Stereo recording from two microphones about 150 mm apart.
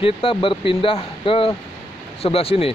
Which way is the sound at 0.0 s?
35° left (ahead or behind).